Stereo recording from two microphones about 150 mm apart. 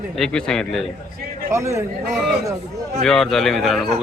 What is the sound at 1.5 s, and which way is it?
Speech, 20° right (ahead or behind).